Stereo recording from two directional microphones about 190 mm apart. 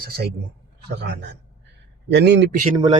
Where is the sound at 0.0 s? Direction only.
55° right (ahead or behind).